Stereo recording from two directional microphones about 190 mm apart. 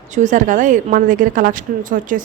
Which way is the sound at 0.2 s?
40° right (ahead or behind).